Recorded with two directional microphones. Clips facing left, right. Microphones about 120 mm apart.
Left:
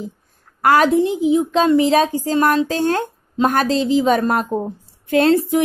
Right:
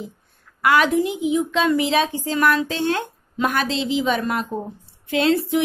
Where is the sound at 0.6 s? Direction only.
40° left (ahead or behind).